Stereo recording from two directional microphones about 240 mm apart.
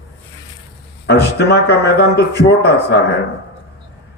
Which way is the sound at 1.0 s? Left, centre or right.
Left.